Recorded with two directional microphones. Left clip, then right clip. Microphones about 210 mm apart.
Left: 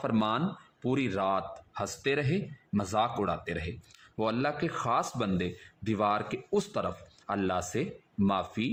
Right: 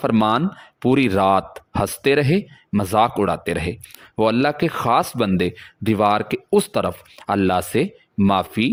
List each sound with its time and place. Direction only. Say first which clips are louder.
0.0 s speech: right 11 dB; 45° right (ahead or behind)